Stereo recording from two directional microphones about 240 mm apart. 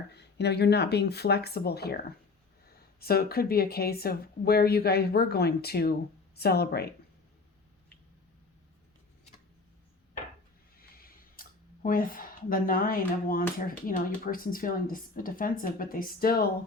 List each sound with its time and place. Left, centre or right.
0.1 s speech: left
10.8 s a sound: left
13.6 s speech: left